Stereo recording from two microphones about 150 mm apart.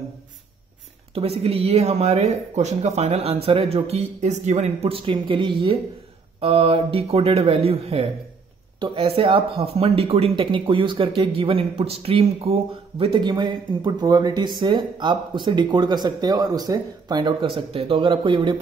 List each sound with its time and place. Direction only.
1.1 s speech: 40° right (ahead or behind)